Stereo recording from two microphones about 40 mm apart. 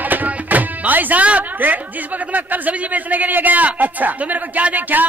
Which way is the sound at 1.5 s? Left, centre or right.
Right.